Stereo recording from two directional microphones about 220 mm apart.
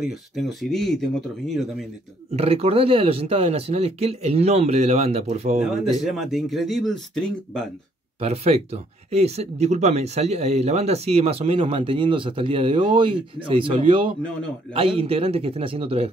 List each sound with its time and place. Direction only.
0.0 s speech: centre (ahead or behind)
2.3 s speech: 30° right (ahead or behind)
5.6 s speech: centre (ahead or behind)
8.2 s speech: 30° right (ahead or behind)